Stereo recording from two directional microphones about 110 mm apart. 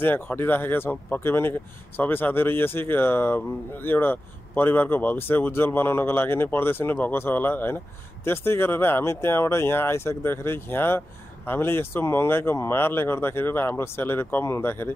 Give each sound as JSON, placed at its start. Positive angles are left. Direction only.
{"t": 0.0, "sound": "speech", "side_deg": 20}